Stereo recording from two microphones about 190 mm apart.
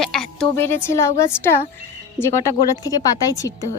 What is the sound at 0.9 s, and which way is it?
Speech, 15° left (ahead or behind).